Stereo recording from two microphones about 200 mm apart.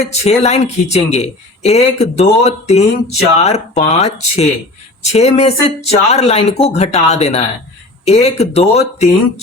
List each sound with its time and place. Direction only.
0.1 s speech: 35° left (ahead or behind)